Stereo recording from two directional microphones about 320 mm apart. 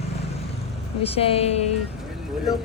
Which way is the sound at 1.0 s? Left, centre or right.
Centre.